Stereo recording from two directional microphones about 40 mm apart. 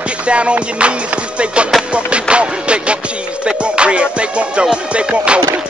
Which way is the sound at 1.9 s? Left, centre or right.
Right.